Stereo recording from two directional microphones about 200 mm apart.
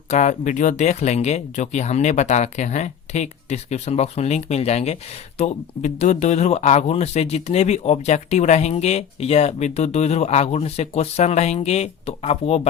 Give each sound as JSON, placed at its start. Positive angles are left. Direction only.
{"t": 0.1, "sound": "speech", "side_deg": 35}